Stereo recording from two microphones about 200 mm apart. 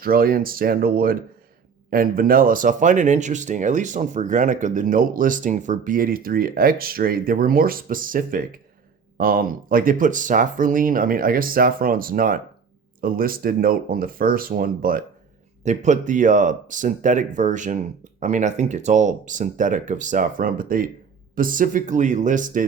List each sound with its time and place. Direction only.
0.0 s speech: 45° right (ahead or behind)